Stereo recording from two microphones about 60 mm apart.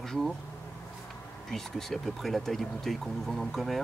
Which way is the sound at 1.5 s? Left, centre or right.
Centre.